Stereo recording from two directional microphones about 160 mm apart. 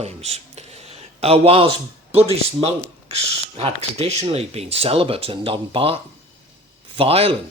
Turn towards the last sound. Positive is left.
turn(degrees=-35)  # may be behind; listen again after turning